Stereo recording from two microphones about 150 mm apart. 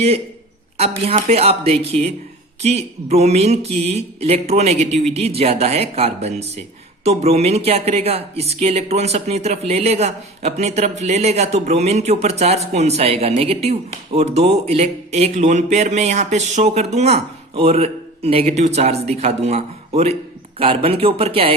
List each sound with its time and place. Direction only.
0.8 s speech: 45° right (ahead or behind)